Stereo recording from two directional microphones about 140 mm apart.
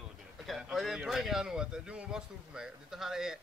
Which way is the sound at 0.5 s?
Centre (ahead or behind).